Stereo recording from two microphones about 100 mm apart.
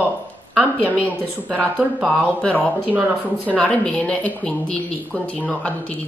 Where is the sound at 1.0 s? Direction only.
10° left (ahead or behind).